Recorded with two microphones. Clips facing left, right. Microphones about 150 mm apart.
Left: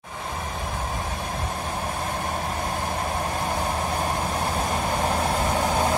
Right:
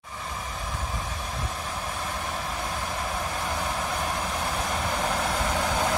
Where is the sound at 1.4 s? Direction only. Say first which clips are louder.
Left 4 dB; 50° left (ahead or behind).